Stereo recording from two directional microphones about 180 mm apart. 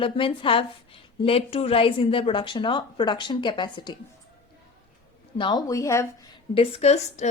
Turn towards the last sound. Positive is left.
turn(degrees=35)  # may be behind; listen again after turning